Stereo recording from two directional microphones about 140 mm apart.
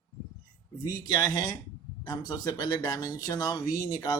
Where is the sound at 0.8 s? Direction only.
30° left (ahead or behind).